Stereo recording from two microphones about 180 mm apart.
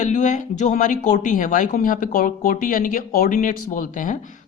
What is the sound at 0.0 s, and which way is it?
A woman's voice, 40° left (ahead or behind).